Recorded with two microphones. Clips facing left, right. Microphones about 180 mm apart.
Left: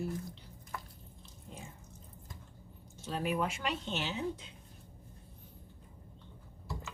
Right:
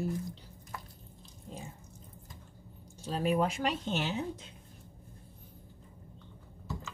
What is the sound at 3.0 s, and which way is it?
Speech, 35° right (ahead or behind).